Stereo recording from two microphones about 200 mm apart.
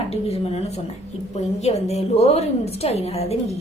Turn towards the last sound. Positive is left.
turn(degrees=30)  # may be behind; listen again after turning